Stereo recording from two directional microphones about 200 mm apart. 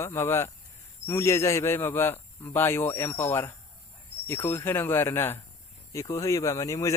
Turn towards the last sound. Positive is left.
turn(degrees=15)  # may be behind; listen again after turning